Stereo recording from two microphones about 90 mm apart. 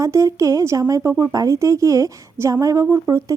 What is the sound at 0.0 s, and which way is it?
Speech, 35° right (ahead or behind).